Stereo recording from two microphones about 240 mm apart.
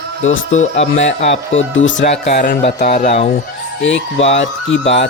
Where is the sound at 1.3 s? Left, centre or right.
Left.